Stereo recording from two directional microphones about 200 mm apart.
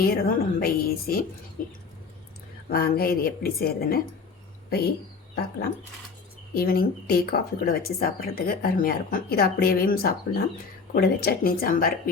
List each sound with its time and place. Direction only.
0.0 s speech: 50° left (ahead or behind)
6.5 s speech: 50° left (ahead or behind)